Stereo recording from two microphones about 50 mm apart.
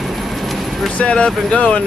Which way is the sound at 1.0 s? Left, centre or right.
Left.